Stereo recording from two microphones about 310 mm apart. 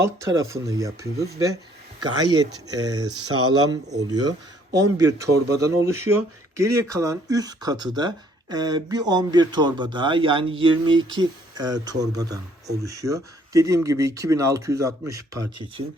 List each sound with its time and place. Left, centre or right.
0.0 s speech: centre